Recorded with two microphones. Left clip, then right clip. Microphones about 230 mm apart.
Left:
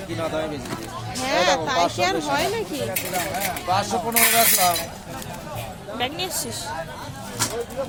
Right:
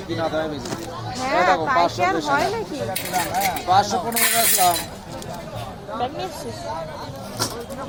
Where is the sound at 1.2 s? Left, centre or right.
Centre.